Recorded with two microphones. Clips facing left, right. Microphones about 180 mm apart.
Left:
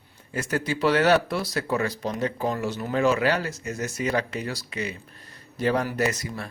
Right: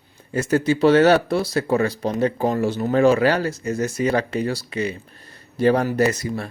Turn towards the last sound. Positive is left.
turn(degrees=-30)  # may be behind; listen again after turning